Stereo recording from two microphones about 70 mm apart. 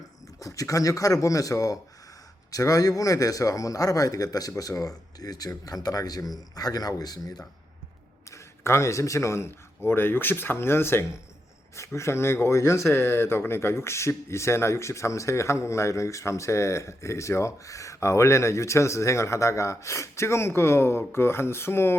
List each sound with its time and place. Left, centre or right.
0.3 s speech: left
8.6 s speech: left